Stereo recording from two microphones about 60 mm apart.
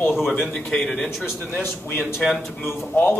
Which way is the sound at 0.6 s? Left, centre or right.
Centre.